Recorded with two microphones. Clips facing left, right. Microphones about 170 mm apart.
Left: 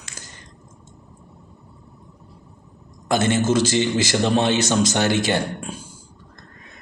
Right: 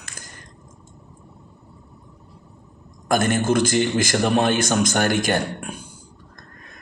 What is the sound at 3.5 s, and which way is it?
A man's voice, 55° right (ahead or behind).